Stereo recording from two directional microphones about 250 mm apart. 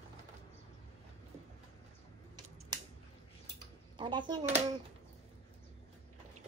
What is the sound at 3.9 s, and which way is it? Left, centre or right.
Speech, centre.